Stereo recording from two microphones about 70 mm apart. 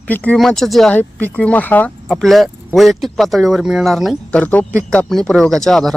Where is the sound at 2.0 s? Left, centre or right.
Centre.